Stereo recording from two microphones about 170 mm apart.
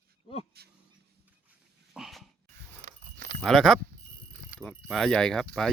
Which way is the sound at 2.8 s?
55° right (ahead or behind).